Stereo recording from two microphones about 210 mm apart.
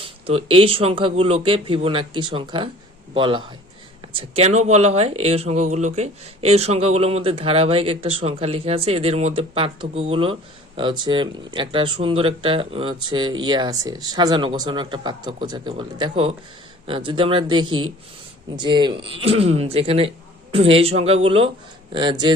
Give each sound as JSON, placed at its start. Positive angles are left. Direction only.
{"t": 0.0, "sound": "speech", "side_deg": -25}